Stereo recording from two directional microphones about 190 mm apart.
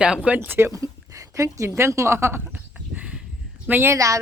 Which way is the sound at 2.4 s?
5° right (ahead or behind).